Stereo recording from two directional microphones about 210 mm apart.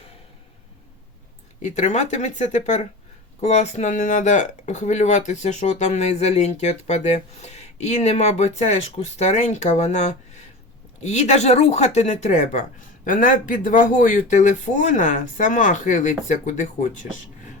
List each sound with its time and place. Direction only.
1.6 s speech: 35° left (ahead or behind)